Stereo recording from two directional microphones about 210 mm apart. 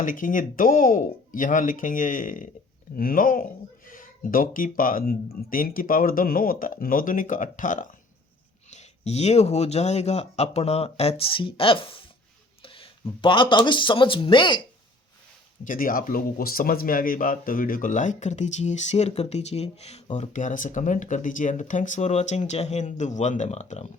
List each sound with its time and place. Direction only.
0.0 s speech: 40° left (ahead or behind); by 14.6 s 25° left (ahead or behind)
15.6 s speech: 40° left (ahead or behind)